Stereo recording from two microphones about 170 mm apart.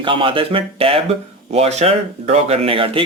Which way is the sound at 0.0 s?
30° right (ahead or behind).